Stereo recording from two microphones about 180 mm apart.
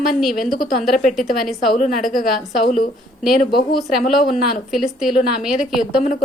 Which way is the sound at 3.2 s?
Centre (ahead or behind).